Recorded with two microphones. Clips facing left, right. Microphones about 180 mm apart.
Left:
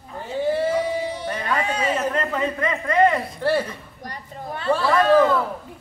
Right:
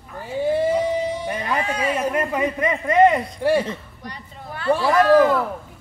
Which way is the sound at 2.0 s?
10° right (ahead or behind).